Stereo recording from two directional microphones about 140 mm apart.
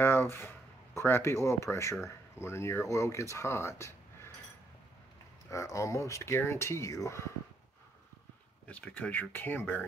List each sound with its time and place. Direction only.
0.0 s speech: 15° left (ahead or behind)
5.5 s speech: 20° left (ahead or behind)
8.6 s speech: 10° left (ahead or behind)